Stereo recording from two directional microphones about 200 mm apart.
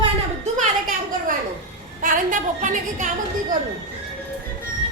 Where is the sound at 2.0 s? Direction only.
40° right (ahead or behind).